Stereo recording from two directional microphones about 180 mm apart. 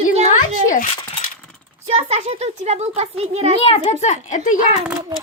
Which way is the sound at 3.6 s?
35° left (ahead or behind).